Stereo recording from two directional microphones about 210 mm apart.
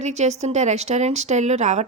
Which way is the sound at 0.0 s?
35° right (ahead or behind).